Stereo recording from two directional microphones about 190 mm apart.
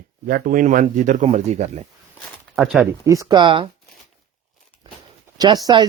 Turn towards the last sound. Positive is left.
turn(degrees=-20)  # may be behind; listen again after turning